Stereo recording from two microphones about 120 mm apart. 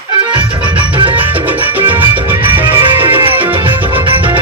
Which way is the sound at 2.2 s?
45° right (ahead or behind).